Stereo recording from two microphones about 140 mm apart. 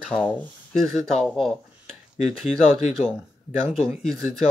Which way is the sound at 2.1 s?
55° left (ahead or behind).